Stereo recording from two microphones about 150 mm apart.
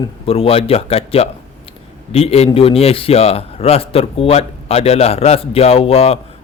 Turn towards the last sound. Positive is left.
turn(degrees=40)  # may be behind; listen again after turning